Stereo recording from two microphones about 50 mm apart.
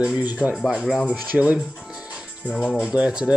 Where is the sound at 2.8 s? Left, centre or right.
Centre.